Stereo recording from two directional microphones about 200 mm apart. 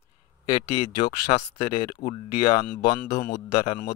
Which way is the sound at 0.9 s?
20° left (ahead or behind).